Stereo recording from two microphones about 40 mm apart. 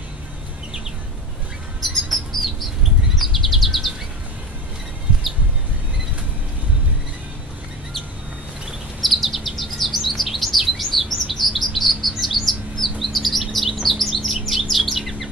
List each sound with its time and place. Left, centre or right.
1.8 s bird: centre
3.2 s chirp: centre
9.0 s chirp: centre